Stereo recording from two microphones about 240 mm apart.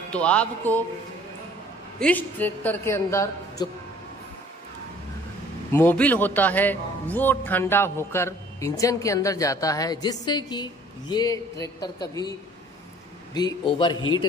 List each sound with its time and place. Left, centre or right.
0.1 s music: centre
2.0 s a man's voice: centre
5.7 s a man's voice: centre
13.3 s a man's voice: centre